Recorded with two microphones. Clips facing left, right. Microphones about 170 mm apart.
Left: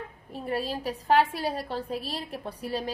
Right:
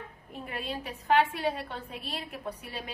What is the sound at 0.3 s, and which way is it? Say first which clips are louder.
A woman's voice: left 6 dB; 35° left (ahead or behind).